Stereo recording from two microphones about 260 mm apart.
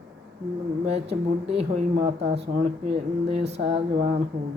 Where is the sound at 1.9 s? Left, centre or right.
Right.